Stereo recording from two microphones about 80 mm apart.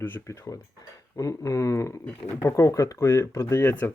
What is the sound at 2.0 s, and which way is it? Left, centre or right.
Speech, left.